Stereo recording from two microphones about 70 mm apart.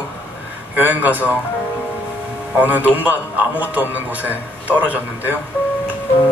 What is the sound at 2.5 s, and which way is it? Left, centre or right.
Speech, right.